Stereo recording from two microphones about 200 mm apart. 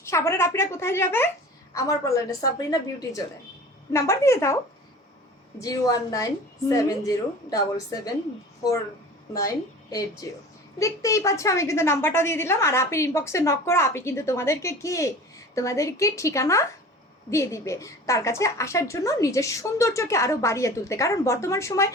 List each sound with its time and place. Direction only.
0.0 s a woman's voice: 15° left (ahead or behind)
5.5 s a woman's voice: 15° left (ahead or behind)
10.2 s a woman's voice: 15° left (ahead or behind)